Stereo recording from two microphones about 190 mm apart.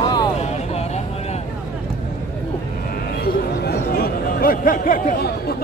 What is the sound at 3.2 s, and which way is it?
Chatter, 55° left (ahead or behind).